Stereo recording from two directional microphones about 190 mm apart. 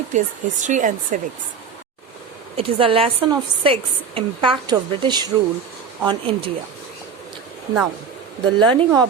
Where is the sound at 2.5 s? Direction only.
30° right (ahead or behind).